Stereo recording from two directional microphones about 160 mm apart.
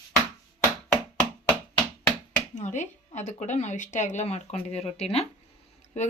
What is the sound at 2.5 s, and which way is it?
Speech, 50° left (ahead or behind).